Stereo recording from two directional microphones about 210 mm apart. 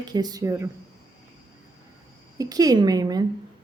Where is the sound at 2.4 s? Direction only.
15° right (ahead or behind).